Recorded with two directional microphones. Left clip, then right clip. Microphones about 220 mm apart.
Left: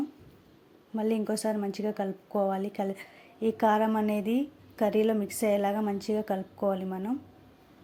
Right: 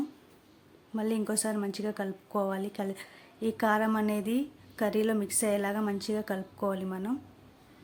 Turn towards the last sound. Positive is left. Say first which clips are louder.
# left 3 dB
turn(degrees=0)  # may be behind; listen again after turning